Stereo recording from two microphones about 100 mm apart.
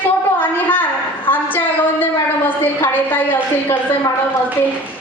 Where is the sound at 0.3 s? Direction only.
20° left (ahead or behind).